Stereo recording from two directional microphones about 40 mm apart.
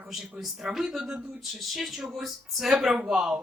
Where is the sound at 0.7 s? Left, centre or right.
Centre.